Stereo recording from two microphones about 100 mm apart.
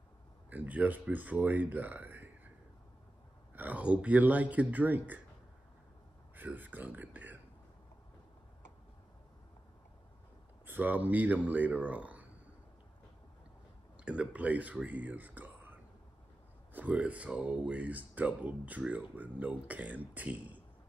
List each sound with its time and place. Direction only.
0.5 s speech: 15° right (ahead or behind)
3.5 s speech: 15° right (ahead or behind)
6.3 s speech: 20° right (ahead or behind)
10.7 s speech: 15° right (ahead or behind)
14.0 s speech: 10° right (ahead or behind)